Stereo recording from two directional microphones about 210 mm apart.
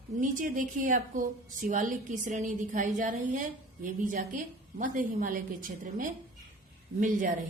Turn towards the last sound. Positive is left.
turn(degrees=-35)  # may be behind; listen again after turning